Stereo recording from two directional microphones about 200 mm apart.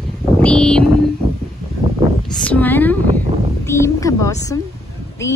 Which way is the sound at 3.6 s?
15° left (ahead or behind).